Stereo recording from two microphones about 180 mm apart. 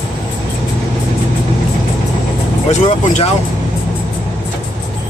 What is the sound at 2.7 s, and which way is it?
Speech, 40° left (ahead or behind).